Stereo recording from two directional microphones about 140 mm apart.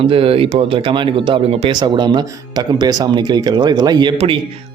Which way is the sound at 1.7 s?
30° right (ahead or behind).